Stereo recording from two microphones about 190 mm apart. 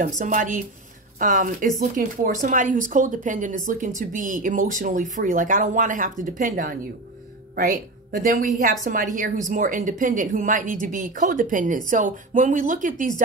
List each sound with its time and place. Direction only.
0.2 s speech: 45° right (ahead or behind)